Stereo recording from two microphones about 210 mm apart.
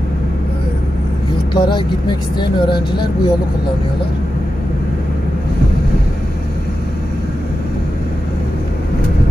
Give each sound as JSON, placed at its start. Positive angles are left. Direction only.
{"t": 1.5, "sound": "speech", "side_deg": 20}